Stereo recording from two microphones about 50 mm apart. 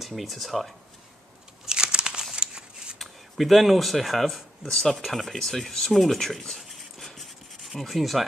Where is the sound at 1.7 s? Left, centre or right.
Centre.